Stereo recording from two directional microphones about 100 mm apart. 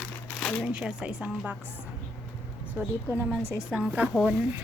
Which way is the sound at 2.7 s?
20° right (ahead or behind).